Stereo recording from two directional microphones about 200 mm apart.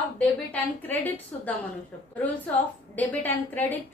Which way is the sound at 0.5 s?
10° left (ahead or behind).